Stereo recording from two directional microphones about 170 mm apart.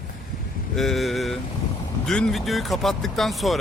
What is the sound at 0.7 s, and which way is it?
A man's voice, centre (ahead or behind).